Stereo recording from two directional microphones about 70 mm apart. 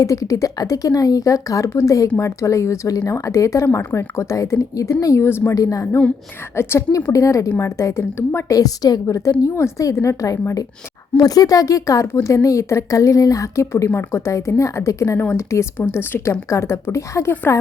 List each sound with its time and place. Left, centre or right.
0.0 s speech: left
5.2 s speech: left
5.5 s speech: left
7.1 s speech: left
8.4 s a woman's voice: left
15.2 s speech: left